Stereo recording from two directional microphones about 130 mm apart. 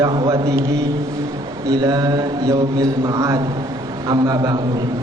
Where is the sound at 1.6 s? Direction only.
25° right (ahead or behind).